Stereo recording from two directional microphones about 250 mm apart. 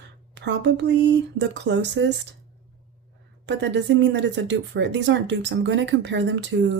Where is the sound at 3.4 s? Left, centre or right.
Right.